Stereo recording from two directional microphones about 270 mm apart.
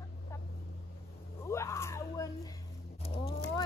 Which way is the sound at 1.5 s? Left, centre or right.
Centre.